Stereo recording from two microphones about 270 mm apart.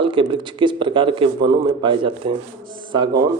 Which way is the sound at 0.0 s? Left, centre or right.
Centre.